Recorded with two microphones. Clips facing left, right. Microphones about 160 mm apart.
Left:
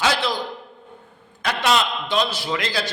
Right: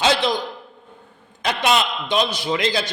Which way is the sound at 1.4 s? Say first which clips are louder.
Right 1 dB; 20° right (ahead or behind).